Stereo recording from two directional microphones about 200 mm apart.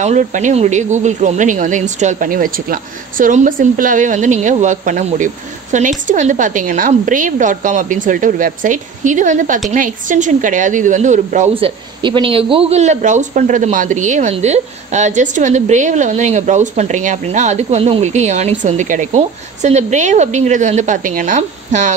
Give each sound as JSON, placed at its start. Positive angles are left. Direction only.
{"t": 0.0, "sound": "a woman's voice", "side_deg": -35}